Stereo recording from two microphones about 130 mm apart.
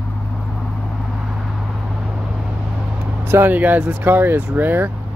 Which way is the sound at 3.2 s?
15° right (ahead or behind).